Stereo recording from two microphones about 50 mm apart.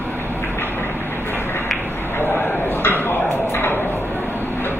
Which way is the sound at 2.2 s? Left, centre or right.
Left.